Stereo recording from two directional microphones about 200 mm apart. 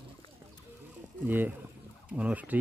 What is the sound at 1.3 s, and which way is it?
A man's voice, 10° right (ahead or behind).